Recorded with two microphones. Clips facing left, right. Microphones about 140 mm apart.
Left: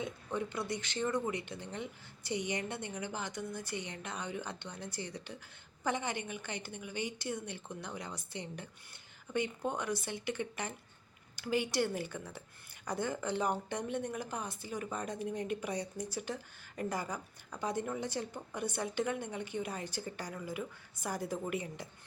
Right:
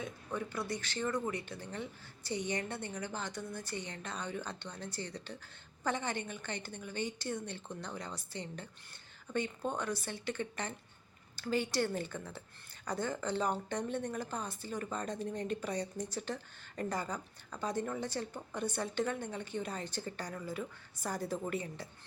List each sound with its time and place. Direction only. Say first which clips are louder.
0.0 s speech: left 2 dB; 20° left (ahead or behind)